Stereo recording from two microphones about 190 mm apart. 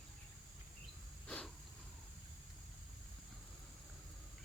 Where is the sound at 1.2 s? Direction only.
5° left (ahead or behind).